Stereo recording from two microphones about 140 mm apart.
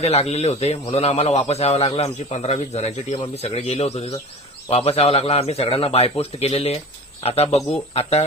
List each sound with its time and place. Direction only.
0.0 s a man's voice: 45° left (ahead or behind)
1.0 s a man's voice: 55° left (ahead or behind)